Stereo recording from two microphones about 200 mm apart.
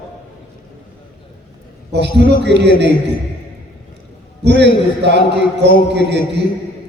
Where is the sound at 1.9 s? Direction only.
60° right (ahead or behind).